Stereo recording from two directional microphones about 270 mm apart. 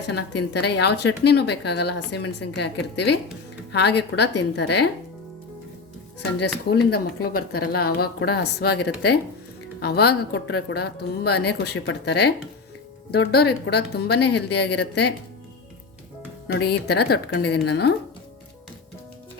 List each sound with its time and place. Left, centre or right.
0.0 s a woman's voice: left
6.7 s a woman's voice: left
16.5 s a woman's voice: left